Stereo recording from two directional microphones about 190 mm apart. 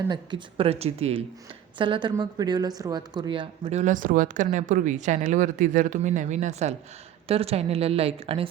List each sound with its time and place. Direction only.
0.1 s speech: 25° right (ahead or behind)